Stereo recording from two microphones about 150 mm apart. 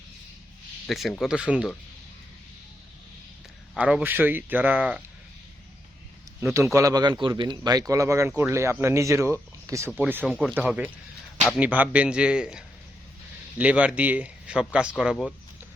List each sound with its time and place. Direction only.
0.9 s speech: centre (ahead or behind)
3.8 s speech: 10° right (ahead or behind)
6.7 s speech: 25° right (ahead or behind)
10.2 s speech: centre (ahead or behind)